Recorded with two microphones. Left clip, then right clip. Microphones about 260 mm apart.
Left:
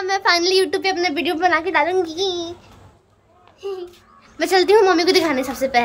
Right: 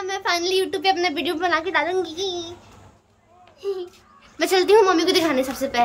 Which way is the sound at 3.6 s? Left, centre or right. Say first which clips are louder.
Right 1 dB; centre.